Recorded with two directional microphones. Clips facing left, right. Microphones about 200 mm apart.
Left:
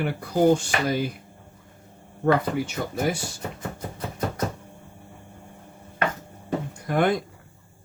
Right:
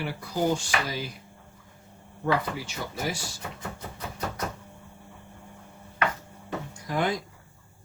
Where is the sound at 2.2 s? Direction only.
55° left (ahead or behind).